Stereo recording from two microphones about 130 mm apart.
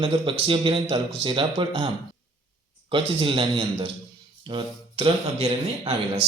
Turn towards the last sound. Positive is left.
turn(degrees=-50)  # may be behind; listen again after turning